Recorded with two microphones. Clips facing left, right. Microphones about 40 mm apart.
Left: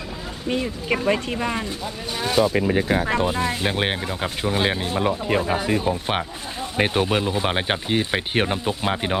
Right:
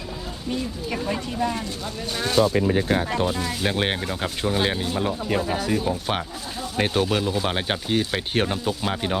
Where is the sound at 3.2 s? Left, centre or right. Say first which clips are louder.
Left 2 dB; left.